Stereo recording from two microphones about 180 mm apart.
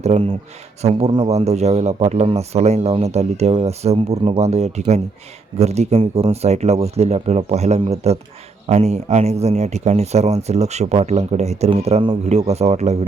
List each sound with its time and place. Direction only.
0.0 s speech: 40° right (ahead or behind)